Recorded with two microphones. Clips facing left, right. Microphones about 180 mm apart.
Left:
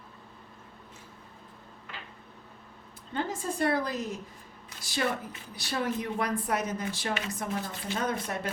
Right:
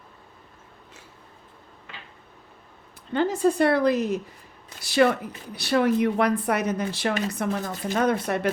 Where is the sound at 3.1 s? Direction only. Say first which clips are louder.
Right 11 dB; 70° right (ahead or behind).